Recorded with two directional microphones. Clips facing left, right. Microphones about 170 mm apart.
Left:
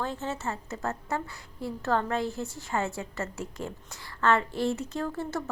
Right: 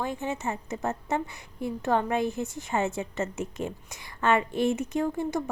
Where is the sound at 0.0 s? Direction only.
15° right (ahead or behind).